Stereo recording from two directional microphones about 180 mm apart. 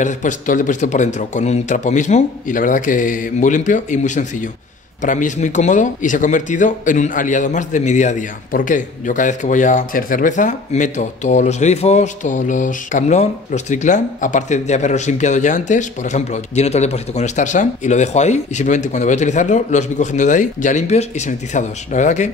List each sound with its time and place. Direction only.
0.0 s speech: 45° left (ahead or behind)